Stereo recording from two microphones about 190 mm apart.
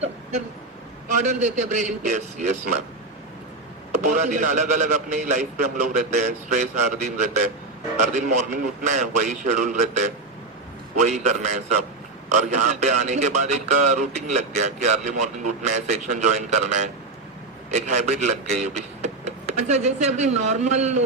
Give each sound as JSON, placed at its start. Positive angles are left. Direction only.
{"t": 1.2, "sound": "speech", "side_deg": -40}
{"t": 3.9, "sound": "a man's voice", "side_deg": -40}